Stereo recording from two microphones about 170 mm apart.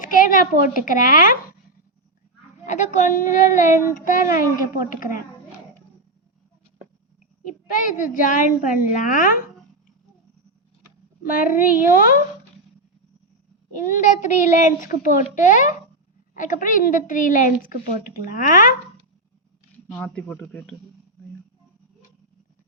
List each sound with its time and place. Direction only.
0.0 s a woman's voice: 55° left (ahead or behind)
2.6 s a woman's voice: 45° left (ahead or behind)
7.9 s a woman's voice: 55° left (ahead or behind)
11.2 s a woman's voice: 55° left (ahead or behind)
11.6 s a woman's voice: 10° right (ahead or behind)
11.9 s a woman's voice: 55° left (ahead or behind)
13.7 s a woman's voice: 50° left (ahead or behind)
19.9 s speech: 10° left (ahead or behind)